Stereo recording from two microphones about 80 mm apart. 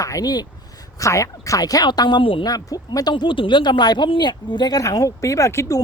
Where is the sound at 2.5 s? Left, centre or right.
Left.